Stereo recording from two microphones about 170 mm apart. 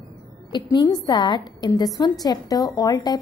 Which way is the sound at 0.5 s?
25° left (ahead or behind).